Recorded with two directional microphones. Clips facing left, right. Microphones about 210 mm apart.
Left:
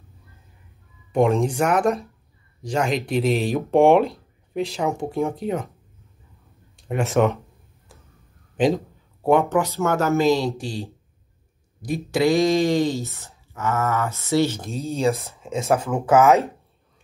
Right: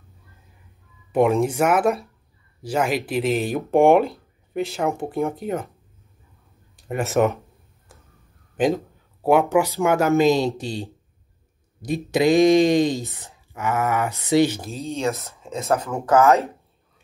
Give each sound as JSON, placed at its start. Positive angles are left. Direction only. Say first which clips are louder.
{"t": 1.1, "sound": "speech", "louder": "right 1 dB", "side_deg": -5}
{"t": 6.8, "sound": "a sound", "louder": "left 1 dB", "side_deg": 0}
{"t": 8.5, "sound": "speech", "louder": "left 1 dB", "side_deg": 0}
{"t": 14.7, "sound": "speech", "louder": "left 3 dB", "side_deg": 5}